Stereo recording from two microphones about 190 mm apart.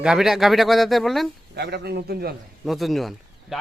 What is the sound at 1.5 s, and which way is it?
Speech, 60° right (ahead or behind).